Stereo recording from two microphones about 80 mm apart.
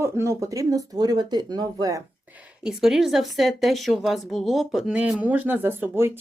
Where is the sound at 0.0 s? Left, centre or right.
Right.